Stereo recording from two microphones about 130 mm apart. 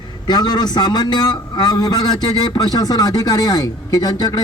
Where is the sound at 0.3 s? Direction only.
35° left (ahead or behind).